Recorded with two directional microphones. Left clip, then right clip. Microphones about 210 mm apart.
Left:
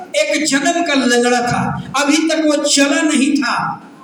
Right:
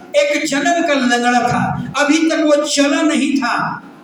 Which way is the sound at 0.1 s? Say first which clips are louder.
Right 1 dB; 55° left (ahead or behind).